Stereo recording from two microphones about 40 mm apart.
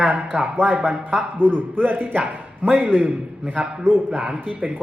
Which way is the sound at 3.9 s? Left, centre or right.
Right.